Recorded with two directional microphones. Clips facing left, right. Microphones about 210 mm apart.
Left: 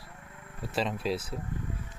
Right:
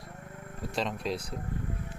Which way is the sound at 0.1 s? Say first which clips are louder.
Right 8 dB; 40° right (ahead or behind).